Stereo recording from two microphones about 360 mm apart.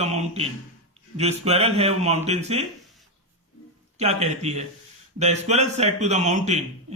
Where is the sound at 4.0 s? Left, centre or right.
Centre.